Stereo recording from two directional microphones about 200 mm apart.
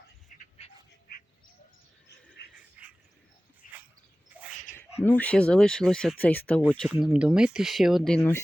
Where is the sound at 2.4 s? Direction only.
60° left (ahead or behind).